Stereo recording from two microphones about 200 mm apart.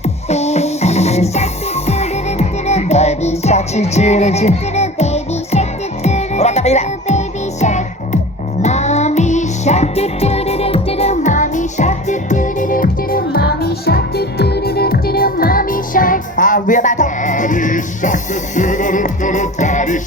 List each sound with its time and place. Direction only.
0.0 s music: 35° left (ahead or behind)